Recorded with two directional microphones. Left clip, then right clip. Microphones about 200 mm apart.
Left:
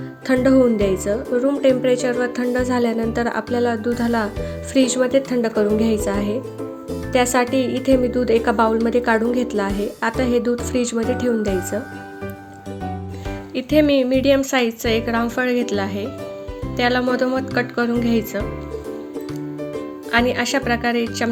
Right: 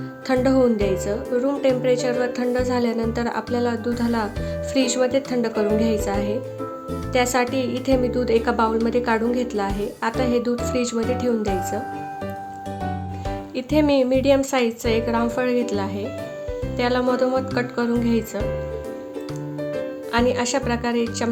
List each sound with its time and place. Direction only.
0.3 s a woman's voice: 10° left (ahead or behind)
13.6 s a woman's voice: centre (ahead or behind)
20.1 s a woman's voice: 5° left (ahead or behind)